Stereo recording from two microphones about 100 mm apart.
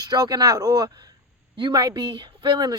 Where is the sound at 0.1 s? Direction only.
40° right (ahead or behind).